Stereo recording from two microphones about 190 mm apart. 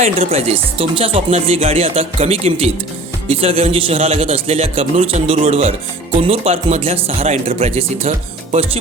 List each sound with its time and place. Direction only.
0.0 s speech: 30° right (ahead or behind)